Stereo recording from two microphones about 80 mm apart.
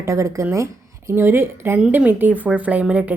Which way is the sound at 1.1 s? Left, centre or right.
Right.